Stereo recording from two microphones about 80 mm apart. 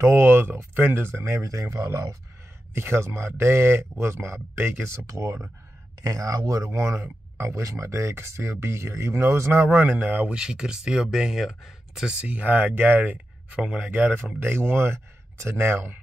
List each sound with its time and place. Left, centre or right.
0.0 s speech: right